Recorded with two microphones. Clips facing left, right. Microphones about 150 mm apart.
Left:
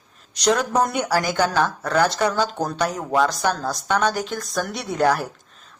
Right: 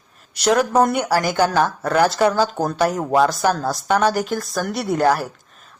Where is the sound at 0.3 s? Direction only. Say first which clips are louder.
Right 4 dB; 5° right (ahead or behind).